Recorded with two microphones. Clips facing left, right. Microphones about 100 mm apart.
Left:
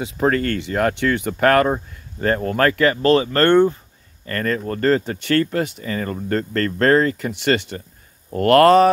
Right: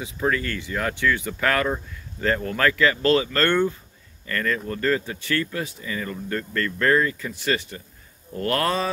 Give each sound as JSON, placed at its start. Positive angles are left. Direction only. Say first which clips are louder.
{"t": 0.0, "sound": "speech", "louder": "left 6 dB", "side_deg": 55}
{"t": 1.3, "sound": "speech", "louder": "left 7 dB", "side_deg": 45}